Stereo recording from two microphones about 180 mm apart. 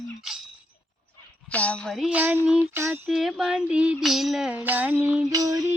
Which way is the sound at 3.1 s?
Centre (ahead or behind).